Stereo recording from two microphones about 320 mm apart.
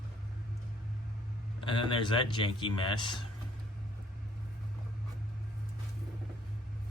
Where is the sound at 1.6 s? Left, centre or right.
Centre.